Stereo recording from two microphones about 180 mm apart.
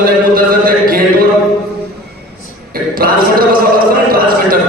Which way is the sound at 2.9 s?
55° right (ahead or behind).